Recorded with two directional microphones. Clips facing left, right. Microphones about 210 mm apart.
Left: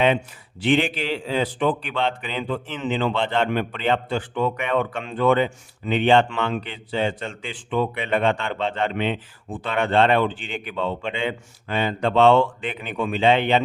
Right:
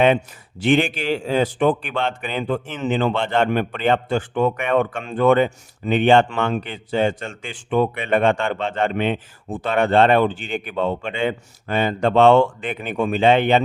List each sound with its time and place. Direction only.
0.6 s a man's voice: 45° right (ahead or behind)